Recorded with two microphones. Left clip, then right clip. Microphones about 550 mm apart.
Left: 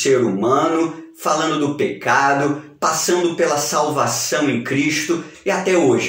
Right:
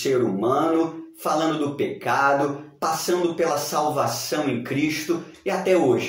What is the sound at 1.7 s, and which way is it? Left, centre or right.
Speech, right.